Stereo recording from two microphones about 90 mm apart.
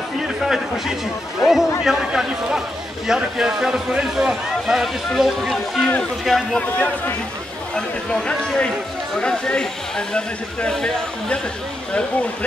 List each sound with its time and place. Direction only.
0.4 s a man's voice: 5° right (ahead or behind)
6.6 s speech: 15° left (ahead or behind)